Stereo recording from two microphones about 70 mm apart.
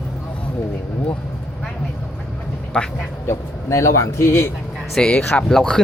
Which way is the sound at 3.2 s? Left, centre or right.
Left.